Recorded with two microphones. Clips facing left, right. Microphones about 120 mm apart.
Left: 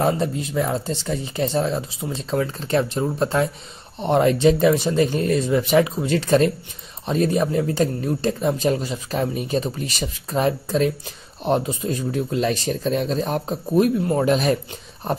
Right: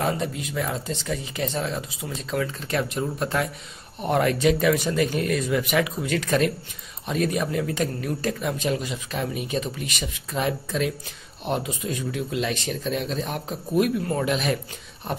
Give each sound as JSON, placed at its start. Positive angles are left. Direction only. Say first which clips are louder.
{"t": 0.0, "sound": "speech", "louder": "left 5 dB", "side_deg": 30}